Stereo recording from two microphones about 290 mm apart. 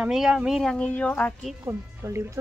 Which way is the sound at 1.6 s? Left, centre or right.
Centre.